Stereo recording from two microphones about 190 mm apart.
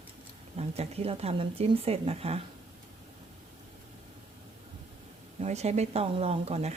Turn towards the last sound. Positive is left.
turn(degrees=-35)  # may be behind; listen again after turning